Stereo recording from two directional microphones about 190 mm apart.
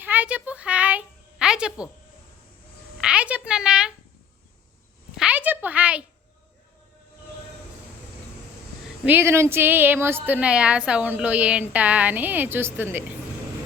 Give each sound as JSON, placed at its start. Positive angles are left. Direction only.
{"t": 0.0, "sound": "a sound", "side_deg": -10}
{"t": 3.0, "sound": "a woman's voice", "side_deg": -5}
{"t": 5.1, "sound": "a woman's voice", "side_deg": -5}
{"t": 9.0, "sound": "a woman's voice", "side_deg": -10}